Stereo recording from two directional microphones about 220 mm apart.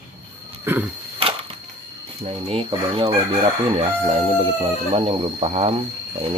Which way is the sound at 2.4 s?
25° right (ahead or behind).